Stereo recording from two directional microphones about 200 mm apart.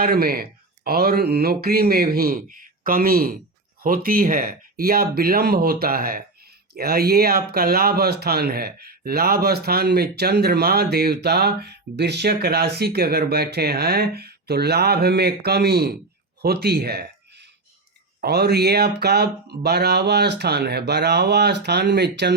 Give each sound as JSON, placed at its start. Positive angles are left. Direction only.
{"t": 0.0, "sound": "speech", "side_deg": -50}
{"t": 16.4, "sound": "a sound", "side_deg": -50}
{"t": 18.2, "sound": "speech", "side_deg": -55}